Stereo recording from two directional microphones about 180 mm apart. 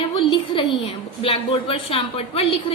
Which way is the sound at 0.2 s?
30° left (ahead or behind).